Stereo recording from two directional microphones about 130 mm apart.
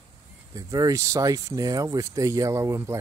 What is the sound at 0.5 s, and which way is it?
Speech, 25° right (ahead or behind).